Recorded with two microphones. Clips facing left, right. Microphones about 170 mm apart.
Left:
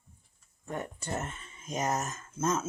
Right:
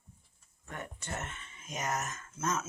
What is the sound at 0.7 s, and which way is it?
Speech, 35° left (ahead or behind).